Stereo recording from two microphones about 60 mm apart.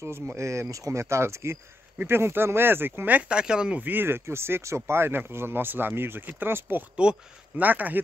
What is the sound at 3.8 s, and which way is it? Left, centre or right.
Speech, right.